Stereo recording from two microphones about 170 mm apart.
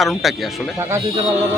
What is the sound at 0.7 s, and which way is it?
Speech, 15° right (ahead or behind).